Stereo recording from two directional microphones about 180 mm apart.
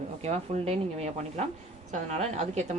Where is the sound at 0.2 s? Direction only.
35° right (ahead or behind).